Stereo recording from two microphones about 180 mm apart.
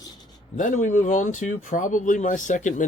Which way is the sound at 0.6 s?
45° left (ahead or behind).